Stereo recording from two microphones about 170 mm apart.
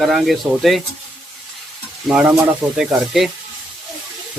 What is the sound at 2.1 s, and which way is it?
Speech, 5° right (ahead or behind).